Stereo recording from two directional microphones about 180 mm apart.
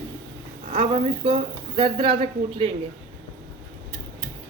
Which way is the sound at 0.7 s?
30° right (ahead or behind).